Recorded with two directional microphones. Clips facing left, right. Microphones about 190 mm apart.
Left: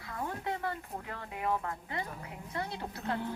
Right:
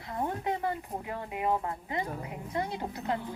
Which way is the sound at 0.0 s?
25° right (ahead or behind).